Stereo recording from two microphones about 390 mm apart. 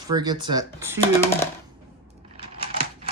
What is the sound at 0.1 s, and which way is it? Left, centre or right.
Speech, centre.